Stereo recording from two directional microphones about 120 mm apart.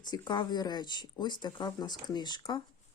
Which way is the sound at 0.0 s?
35° left (ahead or behind).